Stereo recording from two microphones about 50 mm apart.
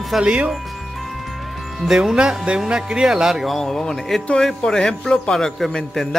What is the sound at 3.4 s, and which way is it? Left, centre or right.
A man's voice, centre.